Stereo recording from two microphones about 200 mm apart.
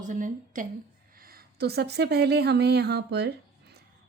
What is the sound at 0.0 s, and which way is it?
A woman's voice, 40° right (ahead or behind).